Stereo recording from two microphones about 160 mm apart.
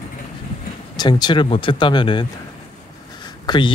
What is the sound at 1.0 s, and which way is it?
Speech, 25° left (ahead or behind).